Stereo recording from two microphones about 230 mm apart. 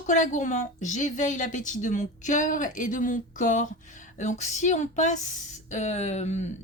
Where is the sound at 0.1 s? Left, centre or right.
Left.